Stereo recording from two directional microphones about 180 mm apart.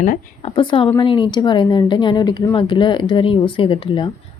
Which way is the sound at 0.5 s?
30° left (ahead or behind).